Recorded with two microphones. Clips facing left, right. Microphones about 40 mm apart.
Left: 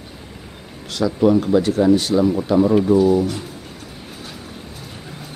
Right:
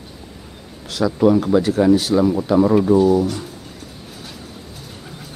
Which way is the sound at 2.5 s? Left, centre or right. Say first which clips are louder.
Right 1 dB; right.